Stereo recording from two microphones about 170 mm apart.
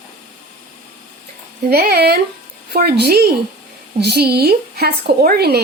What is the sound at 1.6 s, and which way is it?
A woman's voice, 65° right (ahead or behind).